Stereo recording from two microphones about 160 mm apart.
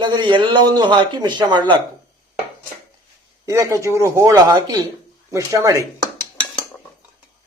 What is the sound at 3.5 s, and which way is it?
A man's voice, 20° right (ahead or behind).